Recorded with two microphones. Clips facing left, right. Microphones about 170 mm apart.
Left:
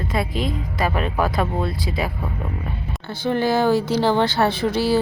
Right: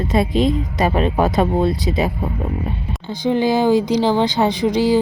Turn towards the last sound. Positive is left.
turn(degrees=-15)  # may be behind; listen again after turning